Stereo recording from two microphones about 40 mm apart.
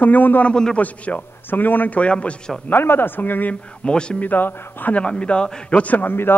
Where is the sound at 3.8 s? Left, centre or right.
Left.